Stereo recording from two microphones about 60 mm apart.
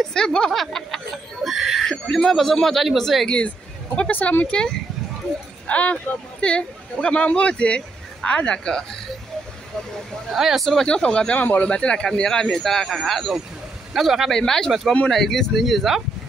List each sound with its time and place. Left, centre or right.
0.0 s speech: centre
0.5 s a sound: centre
1.9 s speech: centre
3.3 s speech: centre
5.7 s speech: left
10.3 s speech: centre
10.9 s speech: centre
14.3 s speech: centre